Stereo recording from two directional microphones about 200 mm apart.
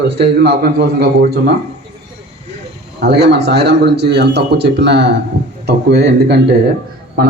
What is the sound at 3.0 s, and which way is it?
A man's voice, 55° right (ahead or behind).